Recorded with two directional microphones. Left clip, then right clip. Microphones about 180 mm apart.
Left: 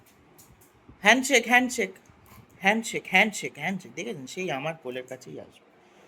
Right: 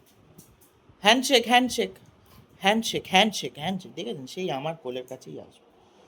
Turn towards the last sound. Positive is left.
turn(degrees=-5)  # may be behind; listen again after turning